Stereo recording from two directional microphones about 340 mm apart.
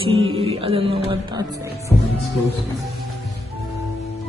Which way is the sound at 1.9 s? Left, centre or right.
Centre.